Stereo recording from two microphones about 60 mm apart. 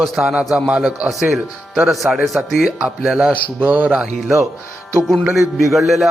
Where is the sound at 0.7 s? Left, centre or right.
Centre.